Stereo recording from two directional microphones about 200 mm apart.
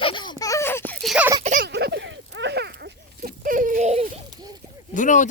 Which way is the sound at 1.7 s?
60° right (ahead or behind).